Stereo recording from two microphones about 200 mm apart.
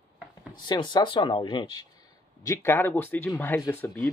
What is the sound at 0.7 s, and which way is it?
Speech, 20° left (ahead or behind).